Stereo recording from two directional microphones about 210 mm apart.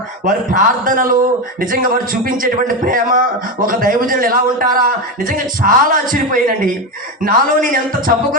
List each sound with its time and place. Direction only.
0.3 s a man's voice: 40° right (ahead or behind)